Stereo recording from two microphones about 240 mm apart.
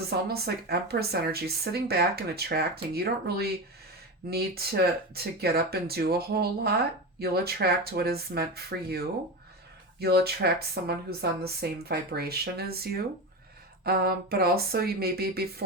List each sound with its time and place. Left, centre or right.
0.1 s speech: right